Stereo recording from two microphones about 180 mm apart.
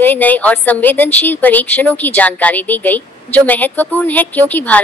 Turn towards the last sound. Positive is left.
turn(degrees=10)  # may be behind; listen again after turning